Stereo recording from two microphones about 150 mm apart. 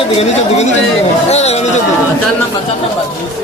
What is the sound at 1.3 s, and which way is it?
Speech, 45° left (ahead or behind).